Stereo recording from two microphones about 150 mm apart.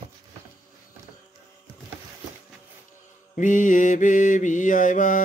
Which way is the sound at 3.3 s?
60° left (ahead or behind).